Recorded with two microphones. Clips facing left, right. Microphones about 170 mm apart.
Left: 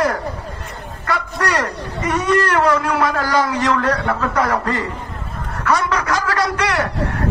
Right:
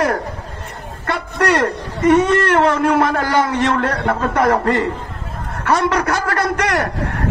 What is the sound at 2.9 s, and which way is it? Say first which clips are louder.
A man's voice: right 2 dB; 35° right (ahead or behind).